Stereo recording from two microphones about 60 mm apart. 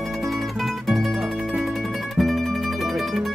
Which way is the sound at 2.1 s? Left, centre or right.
Centre.